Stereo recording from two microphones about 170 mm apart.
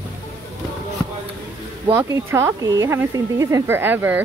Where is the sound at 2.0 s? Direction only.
15° right (ahead or behind).